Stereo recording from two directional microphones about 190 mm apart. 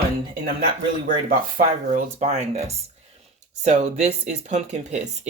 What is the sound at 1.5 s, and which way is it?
Speech, 40° right (ahead or behind).